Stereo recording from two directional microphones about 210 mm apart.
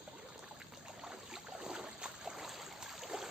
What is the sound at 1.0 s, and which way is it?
Boat, 5° right (ahead or behind).